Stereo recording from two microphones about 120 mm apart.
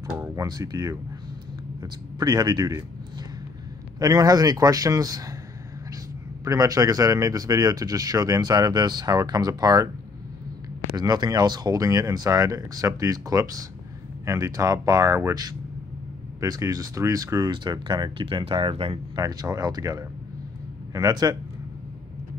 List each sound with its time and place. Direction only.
0.5 s a man's voice: 30° right (ahead or behind)
4.0 s a man's voice: 30° right (ahead or behind)
6.4 s a man's voice: 30° right (ahead or behind)
11.0 s a man's voice: 35° right (ahead or behind); by 18.9 s 50° right (ahead or behind)
19.1 s a man's voice: 30° right (ahead or behind)